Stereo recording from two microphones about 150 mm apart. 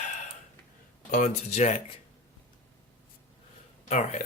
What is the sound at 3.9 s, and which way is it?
Speech, 50° left (ahead or behind).